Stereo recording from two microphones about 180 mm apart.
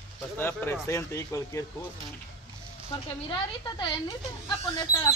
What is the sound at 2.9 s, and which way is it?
Speech, 25° left (ahead or behind).